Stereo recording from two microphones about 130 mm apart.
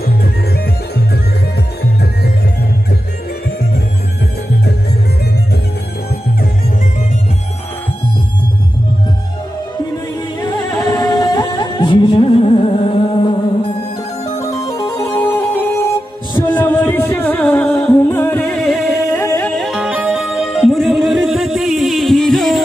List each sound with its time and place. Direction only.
10.4 s music: 25° left (ahead or behind); by 13.3 s 45° left (ahead or behind)
14.2 s music: 25° left (ahead or behind)
15.1 s music: 15° left (ahead or behind)
19.1 s music: 20° left (ahead or behind)
19.4 s music: centre (ahead or behind)